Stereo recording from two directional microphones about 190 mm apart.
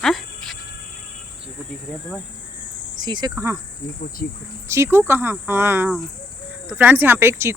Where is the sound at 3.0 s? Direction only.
20° right (ahead or behind).